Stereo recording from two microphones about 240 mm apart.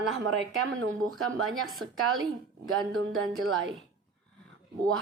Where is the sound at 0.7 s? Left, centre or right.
Right.